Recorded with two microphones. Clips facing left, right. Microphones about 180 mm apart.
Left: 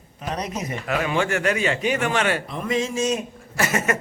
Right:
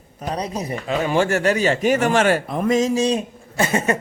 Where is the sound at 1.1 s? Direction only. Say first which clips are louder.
Right 5 dB; 40° right (ahead or behind).